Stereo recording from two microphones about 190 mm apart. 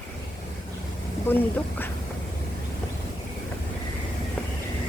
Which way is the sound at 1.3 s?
10° left (ahead or behind).